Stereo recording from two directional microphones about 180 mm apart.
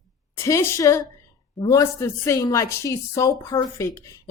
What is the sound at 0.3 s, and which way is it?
A woman's voice, 15° left (ahead or behind).